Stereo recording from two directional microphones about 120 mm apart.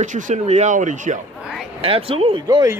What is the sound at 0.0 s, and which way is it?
Speech, 75° right (ahead or behind).